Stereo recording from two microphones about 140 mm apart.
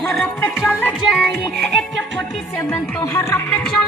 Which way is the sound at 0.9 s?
Centre (ahead or behind).